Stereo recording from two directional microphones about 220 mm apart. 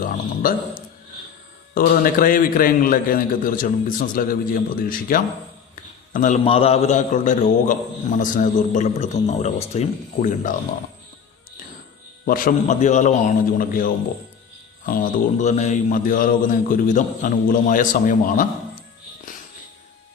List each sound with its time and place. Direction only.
0.0 s a sound: 40° left (ahead or behind)
1.7 s a man's voice: 40° left (ahead or behind)
12.2 s a man's voice: 35° left (ahead or behind)